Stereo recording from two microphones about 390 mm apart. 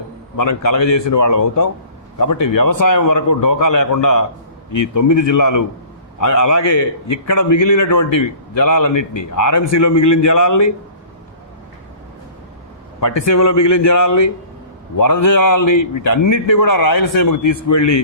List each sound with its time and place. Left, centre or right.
0.3 s a man's voice: left
0.8 s a man's voice: left
1.1 s a man's voice: left
6.7 s a man's voice: left
7.3 s a man's voice: left
8.9 s a man's voice: left
9.3 s a man's voice: left
13.2 s a man's voice: left
15.6 s a man's voice: left
16.0 s a man's voice: left